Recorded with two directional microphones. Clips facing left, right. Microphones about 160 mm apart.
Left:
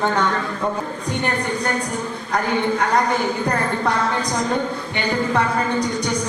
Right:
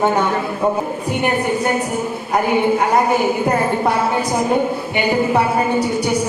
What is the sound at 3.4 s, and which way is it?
Speech, 25° right (ahead or behind).